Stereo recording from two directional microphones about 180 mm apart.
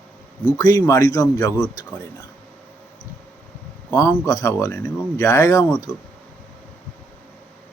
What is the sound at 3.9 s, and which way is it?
Speech, 20° left (ahead or behind).